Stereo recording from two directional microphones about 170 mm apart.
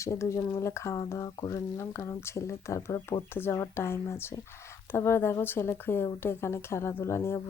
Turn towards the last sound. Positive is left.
turn(degrees=15)  # may be behind; listen again after turning